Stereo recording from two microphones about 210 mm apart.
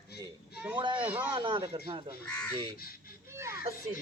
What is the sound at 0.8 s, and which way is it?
Speech, 25° right (ahead or behind).